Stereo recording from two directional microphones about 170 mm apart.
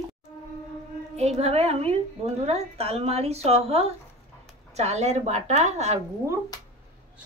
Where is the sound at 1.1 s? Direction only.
40° right (ahead or behind).